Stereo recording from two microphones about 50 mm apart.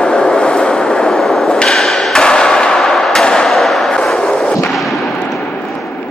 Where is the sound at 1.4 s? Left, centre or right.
Centre.